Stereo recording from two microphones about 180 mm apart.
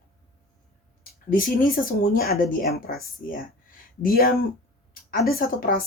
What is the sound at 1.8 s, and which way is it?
A woman's voice, 50° left (ahead or behind).